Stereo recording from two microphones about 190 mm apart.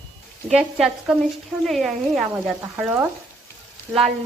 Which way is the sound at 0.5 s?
5° right (ahead or behind).